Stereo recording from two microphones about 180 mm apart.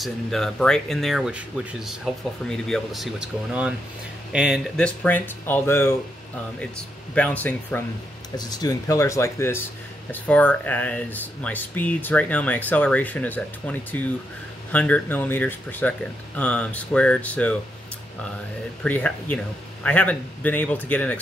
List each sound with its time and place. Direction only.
0.0 s speech: centre (ahead or behind)
2.4 s speech: 5° left (ahead or behind)
7.2 s speech: 10° left (ahead or behind)
8.4 s speech: 20° left (ahead or behind)
18.9 s speech: 10° left (ahead or behind)